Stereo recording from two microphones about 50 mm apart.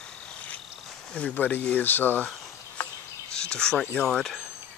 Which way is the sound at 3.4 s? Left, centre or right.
Centre.